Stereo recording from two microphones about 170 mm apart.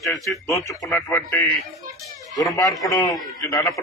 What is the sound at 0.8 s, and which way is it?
Speech, 5° left (ahead or behind).